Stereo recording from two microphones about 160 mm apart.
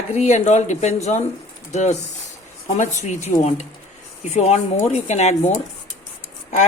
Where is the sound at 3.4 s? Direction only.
50° left (ahead or behind).